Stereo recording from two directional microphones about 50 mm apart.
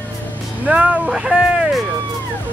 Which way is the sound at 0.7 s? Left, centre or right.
Right.